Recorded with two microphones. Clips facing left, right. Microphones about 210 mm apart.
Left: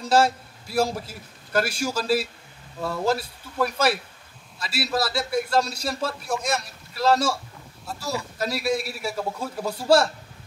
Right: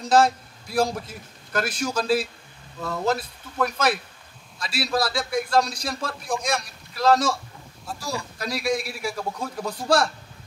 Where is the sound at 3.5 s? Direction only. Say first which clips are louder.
Left 1 dB; 10° left (ahead or behind).